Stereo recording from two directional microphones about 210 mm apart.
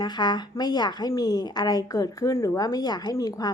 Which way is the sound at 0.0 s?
20° left (ahead or behind).